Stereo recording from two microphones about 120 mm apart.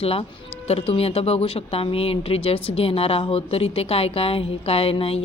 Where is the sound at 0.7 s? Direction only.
55° left (ahead or behind).